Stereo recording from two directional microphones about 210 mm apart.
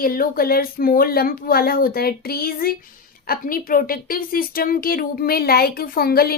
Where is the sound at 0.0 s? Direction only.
45° left (ahead or behind).